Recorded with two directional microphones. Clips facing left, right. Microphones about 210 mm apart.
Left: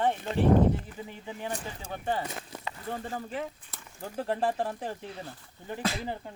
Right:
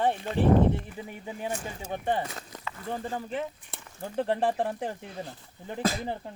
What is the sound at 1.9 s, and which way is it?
Speech, 20° right (ahead or behind).